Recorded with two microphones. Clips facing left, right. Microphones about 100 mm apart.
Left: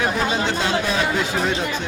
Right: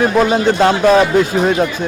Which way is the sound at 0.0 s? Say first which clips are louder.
Right 9 dB; 45° right (ahead or behind).